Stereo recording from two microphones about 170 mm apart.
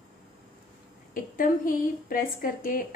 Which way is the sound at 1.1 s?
55° left (ahead or behind).